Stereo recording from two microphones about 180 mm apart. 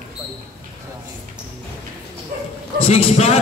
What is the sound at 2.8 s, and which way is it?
Speech, 35° left (ahead or behind).